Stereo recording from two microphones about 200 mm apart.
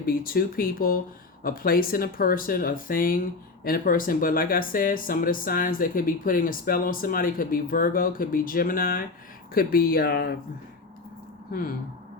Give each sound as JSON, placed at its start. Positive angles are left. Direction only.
{"t": 0.0, "sound": "speech", "side_deg": 45}